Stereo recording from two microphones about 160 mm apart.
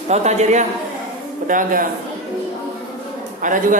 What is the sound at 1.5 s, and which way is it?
Speech, 60° right (ahead or behind).